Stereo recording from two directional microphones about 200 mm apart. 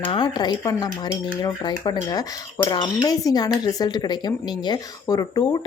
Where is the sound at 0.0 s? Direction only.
25° left (ahead or behind).